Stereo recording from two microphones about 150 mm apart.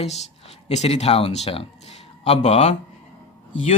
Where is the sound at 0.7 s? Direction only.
45° left (ahead or behind).